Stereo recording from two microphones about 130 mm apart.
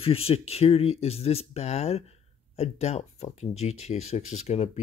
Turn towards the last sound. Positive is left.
turn(degrees=55)  # may be behind; listen again after turning